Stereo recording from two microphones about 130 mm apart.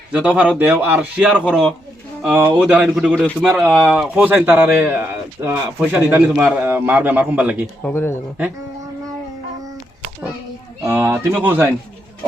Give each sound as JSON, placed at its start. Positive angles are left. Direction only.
{"t": 0.1, "sound": "a man's voice", "side_deg": -10}
{"t": 7.9, "sound": "speech", "side_deg": 15}
{"t": 10.9, "sound": "a man's voice", "side_deg": -20}